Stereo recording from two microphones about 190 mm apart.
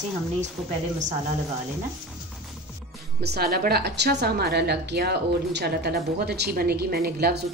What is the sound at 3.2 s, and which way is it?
A woman's voice, 55° right (ahead or behind).